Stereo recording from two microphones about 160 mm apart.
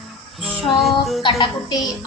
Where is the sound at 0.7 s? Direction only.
Centre (ahead or behind).